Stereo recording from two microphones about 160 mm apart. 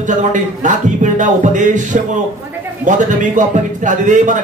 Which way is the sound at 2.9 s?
50° right (ahead or behind).